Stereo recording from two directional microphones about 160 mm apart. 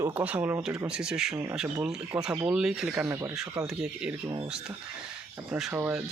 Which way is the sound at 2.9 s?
15° right (ahead or behind).